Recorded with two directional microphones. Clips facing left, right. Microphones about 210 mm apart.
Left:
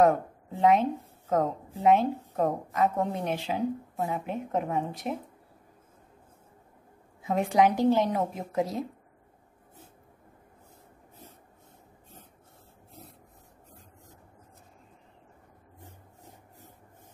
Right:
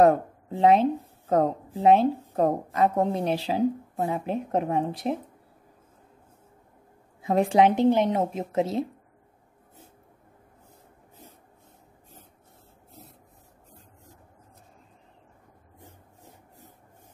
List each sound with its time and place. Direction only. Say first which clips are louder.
0.6 s a woman's voice: right 3 dB; 30° right (ahead or behind)
7.2 s a woman's voice: right 3 dB; 30° right (ahead or behind)